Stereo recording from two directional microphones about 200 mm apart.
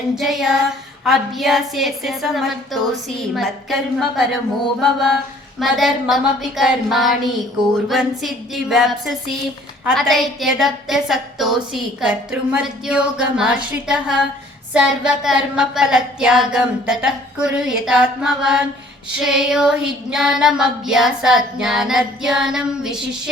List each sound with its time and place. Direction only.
0.2 s a woman's voice: centre (ahead or behind)